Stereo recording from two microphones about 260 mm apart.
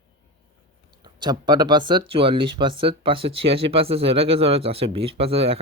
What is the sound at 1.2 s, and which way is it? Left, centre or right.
Speech, centre.